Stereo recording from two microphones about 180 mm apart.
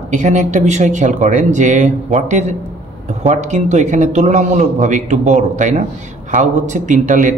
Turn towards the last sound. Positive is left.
turn(degrees=-45)  # may be behind; listen again after turning